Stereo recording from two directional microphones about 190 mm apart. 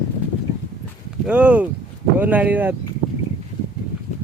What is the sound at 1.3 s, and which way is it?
Speech, 5° right (ahead or behind).